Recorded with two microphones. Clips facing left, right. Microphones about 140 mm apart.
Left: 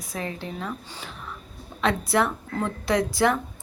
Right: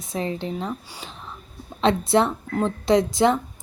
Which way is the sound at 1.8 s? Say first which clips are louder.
Right 4 dB; 25° right (ahead or behind).